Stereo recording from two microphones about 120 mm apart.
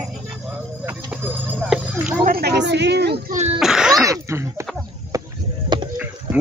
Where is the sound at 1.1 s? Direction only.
15° right (ahead or behind).